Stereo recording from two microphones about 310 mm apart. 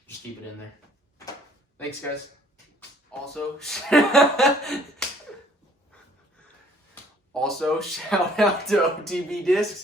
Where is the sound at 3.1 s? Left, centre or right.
Centre.